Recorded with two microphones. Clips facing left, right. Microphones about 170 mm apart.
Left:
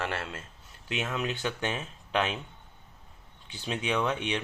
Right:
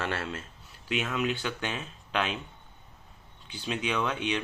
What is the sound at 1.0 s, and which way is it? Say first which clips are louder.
Speech: even; 20° left (ahead or behind).